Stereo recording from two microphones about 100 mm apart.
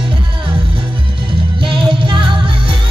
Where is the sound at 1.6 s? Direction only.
55° right (ahead or behind).